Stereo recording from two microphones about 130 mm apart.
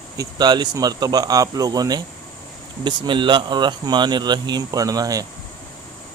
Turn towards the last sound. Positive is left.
turn(degrees=-25)  # may be behind; listen again after turning